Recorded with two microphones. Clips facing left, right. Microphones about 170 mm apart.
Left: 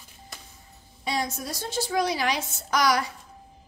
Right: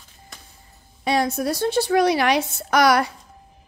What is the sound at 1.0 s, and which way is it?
A woman's voice, 65° right (ahead or behind).